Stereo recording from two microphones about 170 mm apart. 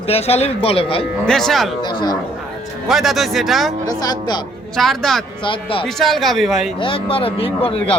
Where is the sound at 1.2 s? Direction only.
Centre (ahead or behind).